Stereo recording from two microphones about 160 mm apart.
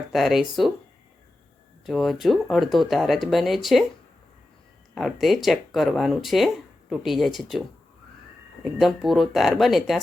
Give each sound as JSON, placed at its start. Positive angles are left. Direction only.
{"t": 0.1, "sound": "speech", "side_deg": 0}
{"t": 1.8, "sound": "speech", "side_deg": 0}
{"t": 4.9, "sound": "speech", "side_deg": 0}
{"t": 8.8, "sound": "speech", "side_deg": 0}